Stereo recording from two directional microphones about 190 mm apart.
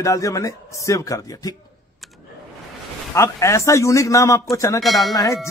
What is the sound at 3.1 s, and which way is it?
A man's voice, 15° left (ahead or behind).